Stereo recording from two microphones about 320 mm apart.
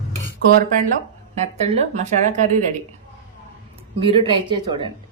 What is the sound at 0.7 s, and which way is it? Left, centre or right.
Speech, right.